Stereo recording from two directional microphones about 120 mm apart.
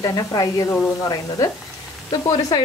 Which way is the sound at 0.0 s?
35° left (ahead or behind).